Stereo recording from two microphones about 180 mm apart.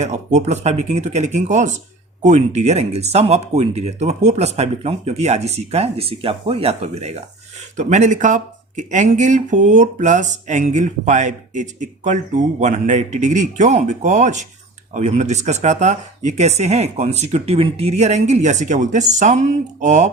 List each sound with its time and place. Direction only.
0.0 s speech: 40° right (ahead or behind)